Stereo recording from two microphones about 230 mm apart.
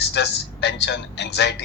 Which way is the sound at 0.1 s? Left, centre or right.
Left.